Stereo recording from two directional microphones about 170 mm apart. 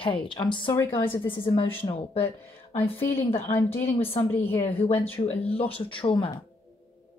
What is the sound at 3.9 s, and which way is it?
Speech, 35° left (ahead or behind).